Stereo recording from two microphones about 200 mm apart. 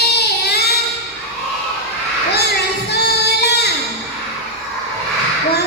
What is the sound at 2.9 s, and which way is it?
Child singing, 55° left (ahead or behind).